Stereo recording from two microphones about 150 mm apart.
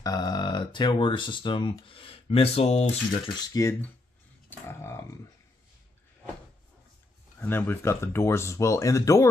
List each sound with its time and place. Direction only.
0.0 s speech: 25° left (ahead or behind); by 2.9 s 45° left (ahead or behind)
3.3 s speech: 25° left (ahead or behind)
7.3 s speech: 15° left (ahead or behind)